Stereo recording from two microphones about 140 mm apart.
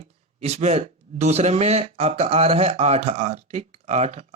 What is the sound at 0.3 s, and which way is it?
Speech, 50° right (ahead or behind).